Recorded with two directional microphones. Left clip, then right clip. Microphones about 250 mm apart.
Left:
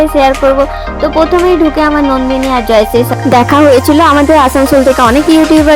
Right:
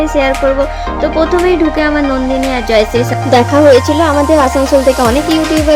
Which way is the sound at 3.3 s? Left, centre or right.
Left.